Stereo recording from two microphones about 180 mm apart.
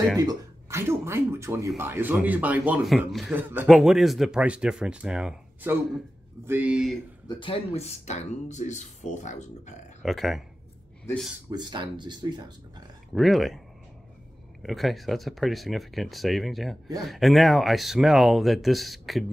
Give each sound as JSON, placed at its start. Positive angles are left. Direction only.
{"t": 0.2, "sound": "a man's voice", "side_deg": -20}
{"t": 3.3, "sound": "a man's voice", "side_deg": -10}
{"t": 7.2, "sound": "speech", "side_deg": 30}
{"t": 10.0, "sound": "speech", "side_deg": 0}
{"t": 11.5, "sound": "speech", "side_deg": -25}
{"t": 13.1, "sound": "speech", "side_deg": 0}
{"t": 14.6, "sound": "speech", "side_deg": 0}